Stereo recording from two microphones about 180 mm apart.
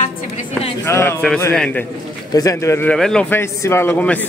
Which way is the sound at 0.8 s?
15° left (ahead or behind).